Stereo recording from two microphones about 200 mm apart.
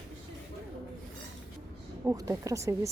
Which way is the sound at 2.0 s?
15° right (ahead or behind).